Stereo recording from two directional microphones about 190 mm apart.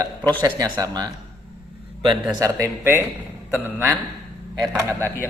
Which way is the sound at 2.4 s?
15° right (ahead or behind).